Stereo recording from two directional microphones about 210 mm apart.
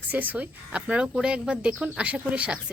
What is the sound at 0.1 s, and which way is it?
Speech, 10° right (ahead or behind).